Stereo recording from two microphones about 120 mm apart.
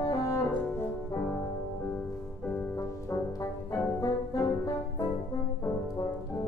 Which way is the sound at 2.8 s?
25° left (ahead or behind).